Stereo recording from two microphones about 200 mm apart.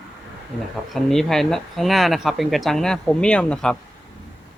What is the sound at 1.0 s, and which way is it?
Speech, centre (ahead or behind).